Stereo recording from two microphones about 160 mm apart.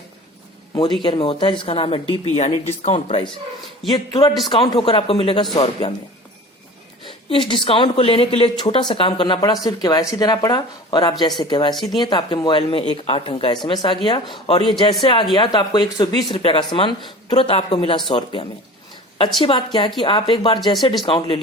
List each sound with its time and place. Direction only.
1.0 s a woman's voice: 35° left (ahead or behind)
7.3 s a woman's voice: 30° left (ahead or behind)